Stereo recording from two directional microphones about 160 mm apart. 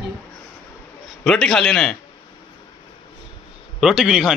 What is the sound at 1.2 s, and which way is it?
Speech, 5° left (ahead or behind).